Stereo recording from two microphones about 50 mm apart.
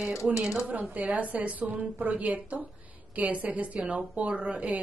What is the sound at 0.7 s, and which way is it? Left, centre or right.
A woman's voice, right.